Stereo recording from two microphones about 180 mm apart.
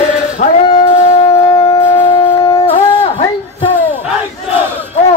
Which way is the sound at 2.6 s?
30° left (ahead or behind).